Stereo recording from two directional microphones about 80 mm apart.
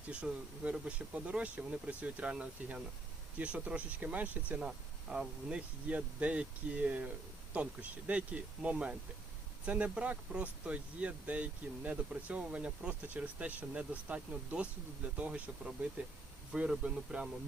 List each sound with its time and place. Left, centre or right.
0.1 s speech: centre